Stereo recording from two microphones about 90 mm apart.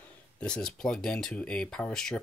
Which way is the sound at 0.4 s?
10° left (ahead or behind).